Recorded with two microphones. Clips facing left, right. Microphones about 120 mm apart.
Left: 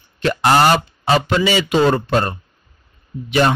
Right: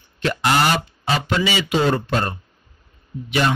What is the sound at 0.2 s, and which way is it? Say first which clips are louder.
Speech: left 5 dB; 40° left (ahead or behind).